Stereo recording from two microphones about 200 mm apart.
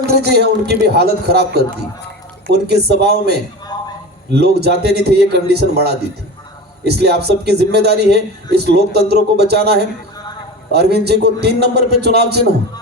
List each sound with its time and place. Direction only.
0.1 s a man's voice: 55° right (ahead or behind)
3.7 s a sound: 20° left (ahead or behind)
4.3 s a man's voice: 55° right (ahead or behind)